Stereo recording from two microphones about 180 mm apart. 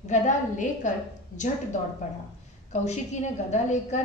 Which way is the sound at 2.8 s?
40° left (ahead or behind).